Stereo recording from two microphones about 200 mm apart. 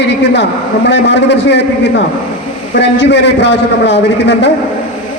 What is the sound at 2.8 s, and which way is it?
A man's voice, 60° left (ahead or behind).